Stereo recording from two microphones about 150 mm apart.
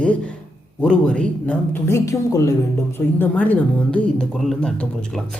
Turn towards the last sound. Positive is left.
turn(degrees=5)  # may be behind; listen again after turning